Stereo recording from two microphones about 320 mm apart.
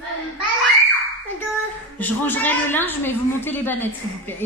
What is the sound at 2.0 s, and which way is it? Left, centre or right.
A woman's voice, centre.